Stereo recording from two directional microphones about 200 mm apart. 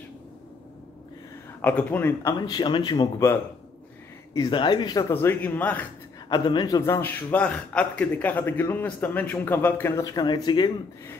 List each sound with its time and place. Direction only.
1.6 s a man's voice: 10° left (ahead or behind)
4.3 s a man's voice: 20° left (ahead or behind)
6.2 s a man's voice: 20° left (ahead or behind)
6.8 s a man's voice: 10° left (ahead or behind)